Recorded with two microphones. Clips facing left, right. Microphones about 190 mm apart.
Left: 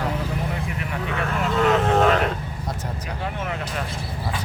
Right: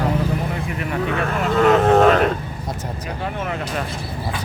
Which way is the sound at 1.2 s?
50° right (ahead or behind).